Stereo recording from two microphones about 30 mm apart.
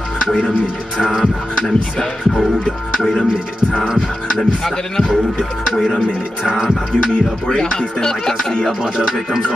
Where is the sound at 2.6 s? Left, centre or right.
Left.